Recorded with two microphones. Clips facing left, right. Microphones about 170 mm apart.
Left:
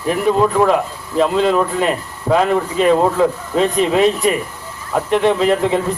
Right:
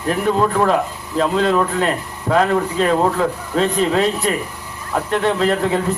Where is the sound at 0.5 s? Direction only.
5° left (ahead or behind).